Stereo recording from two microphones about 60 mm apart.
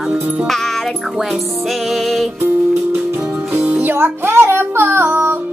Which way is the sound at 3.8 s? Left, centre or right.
Right.